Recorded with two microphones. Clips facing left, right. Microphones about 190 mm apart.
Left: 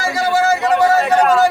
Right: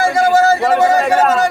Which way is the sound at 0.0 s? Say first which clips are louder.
Right 5 dB; 50° right (ahead or behind).